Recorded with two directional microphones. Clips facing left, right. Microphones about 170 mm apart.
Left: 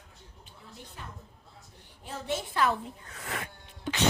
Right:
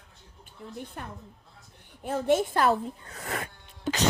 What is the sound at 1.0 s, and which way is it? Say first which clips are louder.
A woman's voice: right 6 dB; 55° right (ahead or behind).